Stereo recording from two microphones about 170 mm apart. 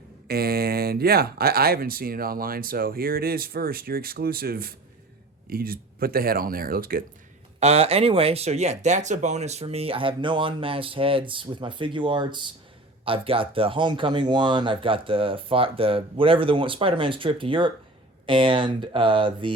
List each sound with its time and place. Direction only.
0.3 s speech: 65° right (ahead or behind)
7.6 s speech: 40° right (ahead or behind)